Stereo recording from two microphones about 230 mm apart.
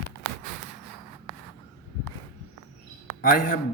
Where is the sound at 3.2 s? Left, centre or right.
Left.